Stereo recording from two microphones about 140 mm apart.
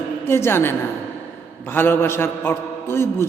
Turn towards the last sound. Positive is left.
turn(degrees=15)  # may be behind; listen again after turning